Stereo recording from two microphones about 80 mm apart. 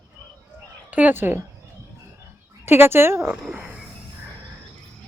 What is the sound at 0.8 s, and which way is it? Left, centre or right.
Speech, centre.